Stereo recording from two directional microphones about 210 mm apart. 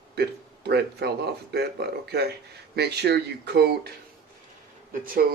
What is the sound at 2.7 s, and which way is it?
Speech, 50° right (ahead or behind).